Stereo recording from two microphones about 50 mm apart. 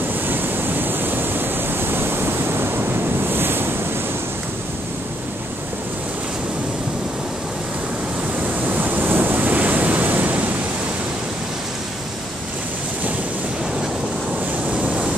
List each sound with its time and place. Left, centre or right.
0.3 s waves: right
8.6 s waves: right